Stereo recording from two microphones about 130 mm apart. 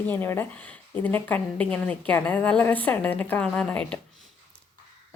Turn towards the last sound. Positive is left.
turn(degrees=10)  # may be behind; listen again after turning